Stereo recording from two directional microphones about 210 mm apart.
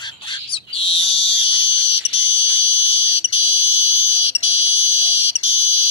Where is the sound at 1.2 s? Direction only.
25° left (ahead or behind).